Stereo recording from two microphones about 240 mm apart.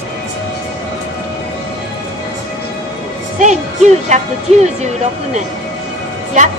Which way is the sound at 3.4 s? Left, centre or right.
Right.